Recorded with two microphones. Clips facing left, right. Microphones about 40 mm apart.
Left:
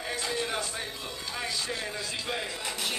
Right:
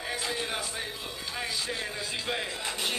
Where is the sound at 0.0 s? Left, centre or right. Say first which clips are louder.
Left 1 dB; centre.